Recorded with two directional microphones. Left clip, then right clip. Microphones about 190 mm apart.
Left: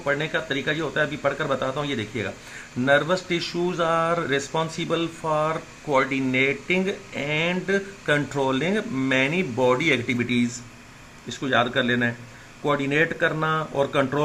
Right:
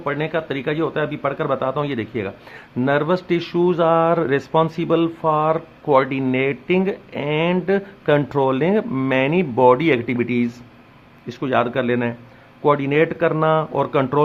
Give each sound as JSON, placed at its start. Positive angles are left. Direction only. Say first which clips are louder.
{"t": 0.0, "sound": "speech", "louder": "right 2 dB", "side_deg": -50}